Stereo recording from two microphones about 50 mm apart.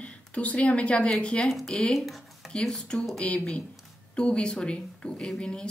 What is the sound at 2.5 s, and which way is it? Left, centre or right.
Speech, centre.